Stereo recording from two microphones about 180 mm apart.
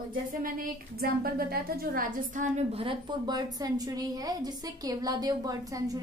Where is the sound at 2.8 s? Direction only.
25° right (ahead or behind).